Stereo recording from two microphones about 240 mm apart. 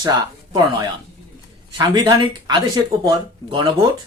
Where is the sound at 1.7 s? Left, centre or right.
Centre.